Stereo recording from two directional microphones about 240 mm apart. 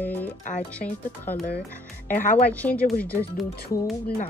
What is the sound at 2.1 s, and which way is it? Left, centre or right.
Speech, left.